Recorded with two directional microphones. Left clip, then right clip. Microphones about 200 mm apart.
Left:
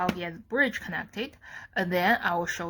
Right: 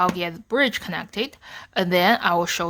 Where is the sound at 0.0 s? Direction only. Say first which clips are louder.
Right 8 dB; 35° right (ahead or behind).